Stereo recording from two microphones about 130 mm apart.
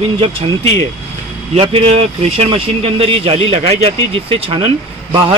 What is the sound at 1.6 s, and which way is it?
Speech, 50° right (ahead or behind).